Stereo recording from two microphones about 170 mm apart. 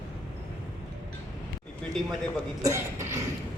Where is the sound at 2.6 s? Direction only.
15° right (ahead or behind).